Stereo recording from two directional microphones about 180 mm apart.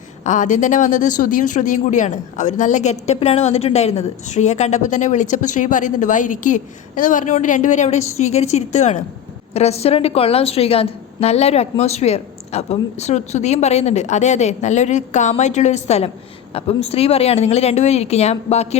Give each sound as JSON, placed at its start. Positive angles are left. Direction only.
{"t": 0.3, "sound": "a woman's voice", "side_deg": 45}